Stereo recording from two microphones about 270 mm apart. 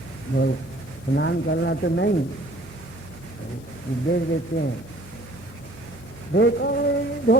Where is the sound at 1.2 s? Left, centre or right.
Left.